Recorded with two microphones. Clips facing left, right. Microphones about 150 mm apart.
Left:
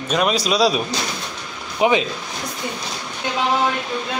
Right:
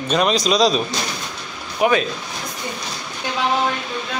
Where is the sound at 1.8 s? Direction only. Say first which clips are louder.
Even; 20° left (ahead or behind).